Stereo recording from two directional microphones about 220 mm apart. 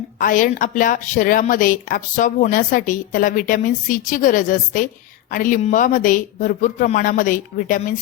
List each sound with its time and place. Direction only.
0.2 s a woman's voice: 35° left (ahead or behind)